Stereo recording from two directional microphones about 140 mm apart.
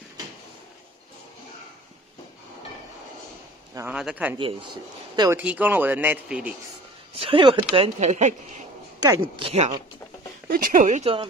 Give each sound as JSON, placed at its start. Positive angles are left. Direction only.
{"t": 3.9, "sound": "speech", "side_deg": -5}
{"t": 4.4, "sound": "speech", "side_deg": -40}
{"t": 5.4, "sound": "speech", "side_deg": -10}
{"t": 7.2, "sound": "speech", "side_deg": -40}
{"t": 8.0, "sound": "a woman's voice", "side_deg": -55}
{"t": 10.5, "sound": "a woman's voice", "side_deg": -80}